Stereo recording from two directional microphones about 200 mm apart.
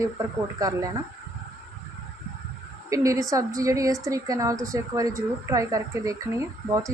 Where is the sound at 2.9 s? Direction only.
15° right (ahead or behind).